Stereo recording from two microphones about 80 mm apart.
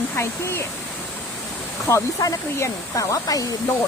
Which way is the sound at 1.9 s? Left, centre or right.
Left.